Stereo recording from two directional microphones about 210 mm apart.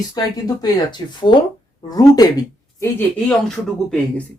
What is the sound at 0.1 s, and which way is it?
Speech, 20° left (ahead or behind).